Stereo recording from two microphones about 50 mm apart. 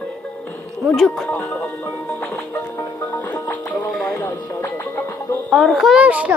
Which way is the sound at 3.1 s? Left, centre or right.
Left.